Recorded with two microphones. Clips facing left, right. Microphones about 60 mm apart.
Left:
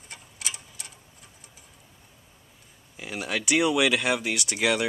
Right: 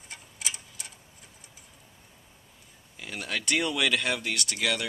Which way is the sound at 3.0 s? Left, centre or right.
Centre.